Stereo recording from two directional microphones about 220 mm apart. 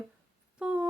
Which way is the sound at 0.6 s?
5° right (ahead or behind).